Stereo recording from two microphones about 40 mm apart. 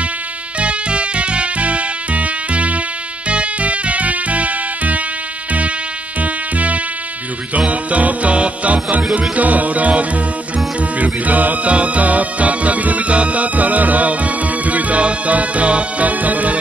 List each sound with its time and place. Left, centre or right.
0.6 s music: right
6.2 s insect: right
7.5 s music: right